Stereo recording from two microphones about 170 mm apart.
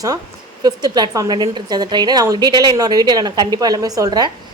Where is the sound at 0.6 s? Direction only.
25° right (ahead or behind).